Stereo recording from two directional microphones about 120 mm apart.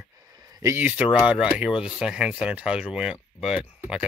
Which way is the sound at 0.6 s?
20° right (ahead or behind).